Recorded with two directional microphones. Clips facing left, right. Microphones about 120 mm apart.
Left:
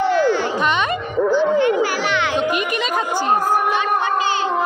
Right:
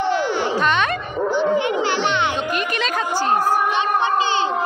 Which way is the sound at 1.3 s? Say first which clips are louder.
Left 2 dB; 20° right (ahead or behind).